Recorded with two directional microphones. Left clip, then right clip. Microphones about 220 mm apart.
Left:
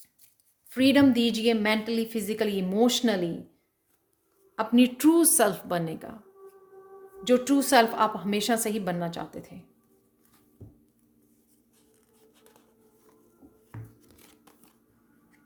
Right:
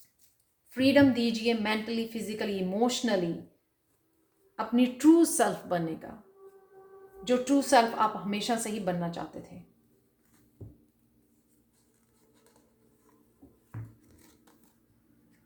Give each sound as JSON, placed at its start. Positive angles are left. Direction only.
{"t": 0.7, "sound": "a woman's voice", "side_deg": 50}
{"t": 4.5, "sound": "a woman's voice", "side_deg": 45}
{"t": 7.3, "sound": "a woman's voice", "side_deg": 50}
{"t": 14.0, "sound": "crumpling", "side_deg": 40}